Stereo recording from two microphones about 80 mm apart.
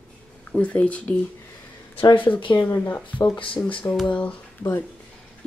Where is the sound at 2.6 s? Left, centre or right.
Left.